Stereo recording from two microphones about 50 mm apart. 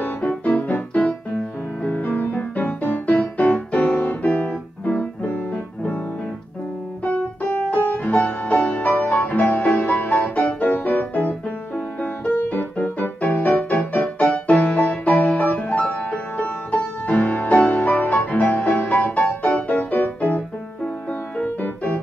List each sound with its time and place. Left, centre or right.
0.0 s music: left
7.7 s music: left
13.2 s music: left